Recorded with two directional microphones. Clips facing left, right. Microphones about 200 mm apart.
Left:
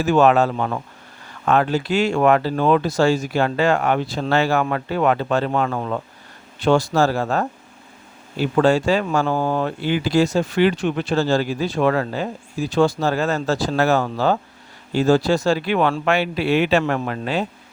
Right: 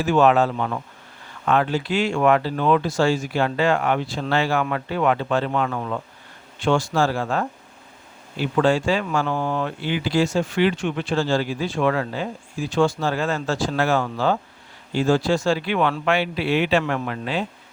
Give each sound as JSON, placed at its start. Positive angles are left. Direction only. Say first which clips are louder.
{"t": 0.0, "sound": "speech", "louder": "left 2 dB", "side_deg": 45}